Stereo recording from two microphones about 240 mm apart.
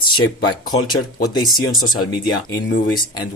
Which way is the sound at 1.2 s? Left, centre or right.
Centre.